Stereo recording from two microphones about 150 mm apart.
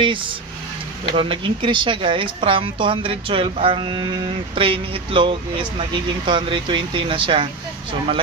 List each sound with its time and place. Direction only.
1.1 s speech: 35° right (ahead or behind)